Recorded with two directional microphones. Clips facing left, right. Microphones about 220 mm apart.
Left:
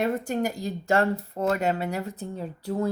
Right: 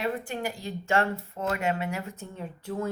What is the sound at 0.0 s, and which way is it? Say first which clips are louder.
Speech: left 5 dB; 45° left (ahead or behind).